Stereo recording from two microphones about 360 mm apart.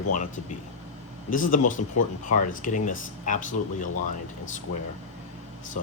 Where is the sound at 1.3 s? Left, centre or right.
Left.